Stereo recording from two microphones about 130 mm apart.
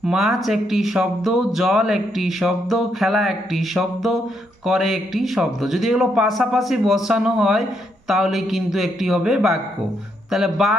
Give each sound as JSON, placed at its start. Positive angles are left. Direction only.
{"t": 0.0, "sound": "speech", "side_deg": -5}